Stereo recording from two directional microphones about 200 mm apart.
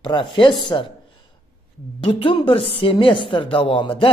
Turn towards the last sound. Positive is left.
turn(degrees=25)  # may be behind; listen again after turning